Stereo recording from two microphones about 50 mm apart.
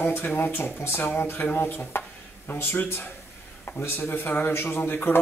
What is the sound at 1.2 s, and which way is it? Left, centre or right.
Speech, left.